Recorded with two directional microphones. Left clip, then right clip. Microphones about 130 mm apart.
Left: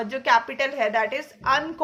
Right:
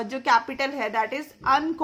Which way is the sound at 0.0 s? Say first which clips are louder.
Left 1 dB; 40° right (ahead or behind).